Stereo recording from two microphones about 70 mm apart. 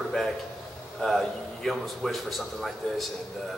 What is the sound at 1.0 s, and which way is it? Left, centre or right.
A man's voice, centre.